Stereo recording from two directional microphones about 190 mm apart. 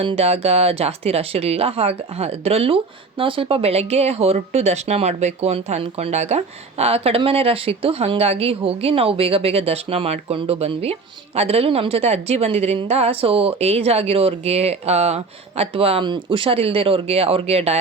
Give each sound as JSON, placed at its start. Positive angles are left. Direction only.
{"t": 0.0, "sound": "speech", "side_deg": -30}